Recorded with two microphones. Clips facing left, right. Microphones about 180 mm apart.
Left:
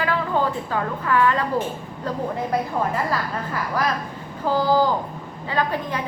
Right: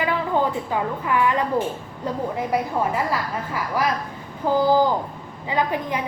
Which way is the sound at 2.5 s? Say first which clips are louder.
Right 2 dB; 10° right (ahead or behind).